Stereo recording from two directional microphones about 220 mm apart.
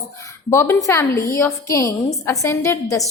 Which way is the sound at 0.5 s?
10° left (ahead or behind).